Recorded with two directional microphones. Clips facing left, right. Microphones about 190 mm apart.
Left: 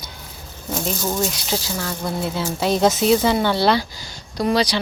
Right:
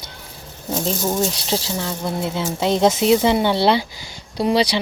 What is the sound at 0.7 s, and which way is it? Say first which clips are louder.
A woman's voice: right 2 dB; 25° right (ahead or behind).